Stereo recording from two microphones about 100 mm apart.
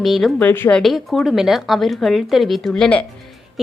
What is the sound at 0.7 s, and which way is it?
A woman's voice, centre (ahead or behind).